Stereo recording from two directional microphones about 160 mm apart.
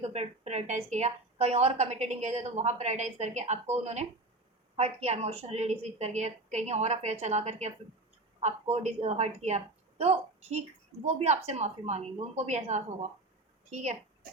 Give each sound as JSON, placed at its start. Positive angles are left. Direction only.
{"t": 0.0, "sound": "a woman's voice", "side_deg": -45}
{"t": 8.7, "sound": "a woman's voice", "side_deg": -40}